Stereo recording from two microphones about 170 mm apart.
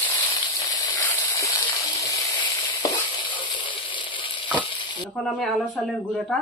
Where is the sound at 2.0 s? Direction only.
20° left (ahead or behind).